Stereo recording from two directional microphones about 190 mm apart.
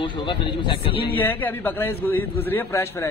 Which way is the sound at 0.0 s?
25° left (ahead or behind).